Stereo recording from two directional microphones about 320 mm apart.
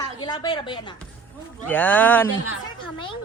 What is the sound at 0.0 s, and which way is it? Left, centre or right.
A woman's voice, centre.